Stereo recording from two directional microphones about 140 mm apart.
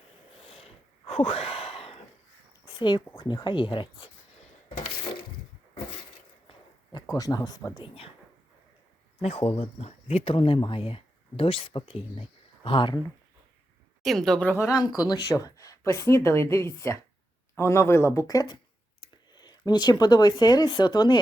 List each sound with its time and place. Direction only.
0.4 s a sound: 45° left (ahead or behind)
3.2 s speech: 30° left (ahead or behind)
6.5 s a sound: 30° left (ahead or behind)
9.2 s speech: 45° left (ahead or behind)
14.0 s a woman's voice: centre (ahead or behind)
14.7 s a woman's voice: 5° right (ahead or behind)
15.1 s a woman's voice: 25° left (ahead or behind)